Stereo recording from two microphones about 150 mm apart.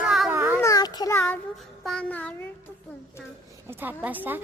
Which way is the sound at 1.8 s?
5° left (ahead or behind).